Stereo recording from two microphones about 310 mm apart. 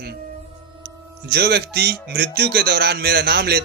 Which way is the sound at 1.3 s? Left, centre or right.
Right.